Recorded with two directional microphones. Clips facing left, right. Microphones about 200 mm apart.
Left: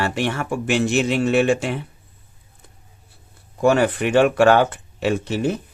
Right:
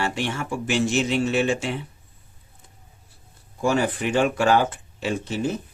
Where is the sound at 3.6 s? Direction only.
60° left (ahead or behind).